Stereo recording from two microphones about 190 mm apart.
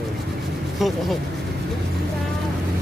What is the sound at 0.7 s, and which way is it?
Speech, centre (ahead or behind).